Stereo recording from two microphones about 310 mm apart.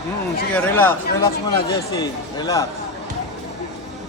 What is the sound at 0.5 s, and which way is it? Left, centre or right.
Speech, centre.